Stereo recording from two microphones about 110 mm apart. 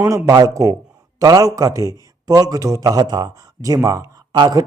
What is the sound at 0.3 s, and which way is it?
Speech, 30° right (ahead or behind).